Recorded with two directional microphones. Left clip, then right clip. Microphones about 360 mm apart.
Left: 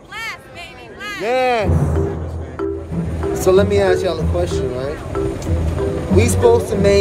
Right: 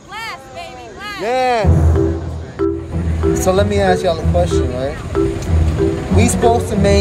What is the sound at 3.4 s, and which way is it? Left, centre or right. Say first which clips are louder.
Speech: left 2 dB; centre.